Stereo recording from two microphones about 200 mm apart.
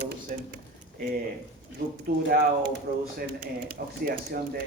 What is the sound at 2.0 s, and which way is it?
Speech, 50° right (ahead or behind).